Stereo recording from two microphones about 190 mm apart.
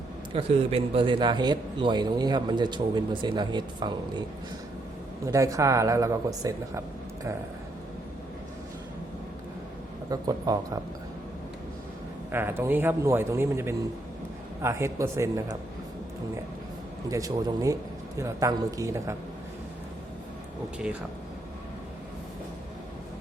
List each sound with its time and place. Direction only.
0.3 s a man's voice: 30° right (ahead or behind)
5.2 s speech: 15° right (ahead or behind)
10.1 s a man's voice: 20° right (ahead or behind)
12.3 s speech: 10° right (ahead or behind)
17.1 s speech: 20° right (ahead or behind)